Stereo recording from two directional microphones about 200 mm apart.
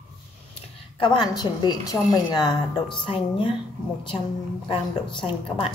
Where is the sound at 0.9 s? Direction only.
20° left (ahead or behind).